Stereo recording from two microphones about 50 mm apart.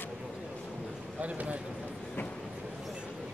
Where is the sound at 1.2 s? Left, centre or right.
Right.